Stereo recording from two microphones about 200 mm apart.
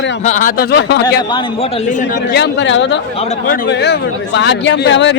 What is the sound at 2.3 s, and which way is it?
Speech, 60° left (ahead or behind).